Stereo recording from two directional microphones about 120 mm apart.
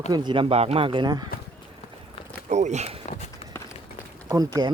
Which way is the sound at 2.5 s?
70° right (ahead or behind).